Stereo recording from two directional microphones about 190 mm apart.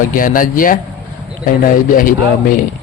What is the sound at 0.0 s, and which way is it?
A man's voice, 45° left (ahead or behind).